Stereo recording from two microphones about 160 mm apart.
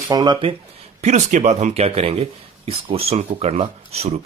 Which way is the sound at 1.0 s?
45° right (ahead or behind).